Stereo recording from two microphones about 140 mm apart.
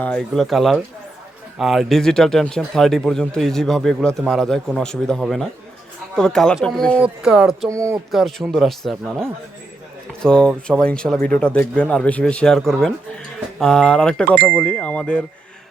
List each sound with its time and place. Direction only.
0.0 s speech: 5° left (ahead or behind)
7.0 s speech: 5° right (ahead or behind)
7.7 s speech: 20° right (ahead or behind)
8.1 s speech: centre (ahead or behind)